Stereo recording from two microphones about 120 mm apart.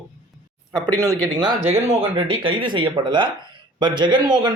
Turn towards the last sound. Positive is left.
turn(degrees=-40)  # may be behind; listen again after turning